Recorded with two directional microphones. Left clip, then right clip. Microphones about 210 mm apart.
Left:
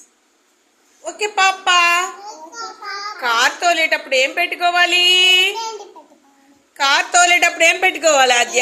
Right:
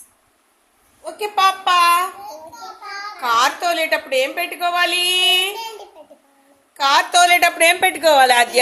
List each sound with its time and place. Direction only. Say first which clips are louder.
1.0 s a woman's voice: left 1 dB; 15° right (ahead or behind)
3.2 s a woman's voice: even; 15° right (ahead or behind)
6.7 s a woman's voice: even; 15° right (ahead or behind)